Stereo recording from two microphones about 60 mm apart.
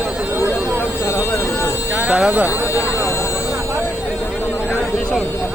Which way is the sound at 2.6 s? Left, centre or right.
Left.